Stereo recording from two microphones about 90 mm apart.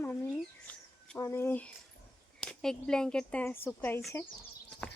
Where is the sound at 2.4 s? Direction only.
5° left (ahead or behind).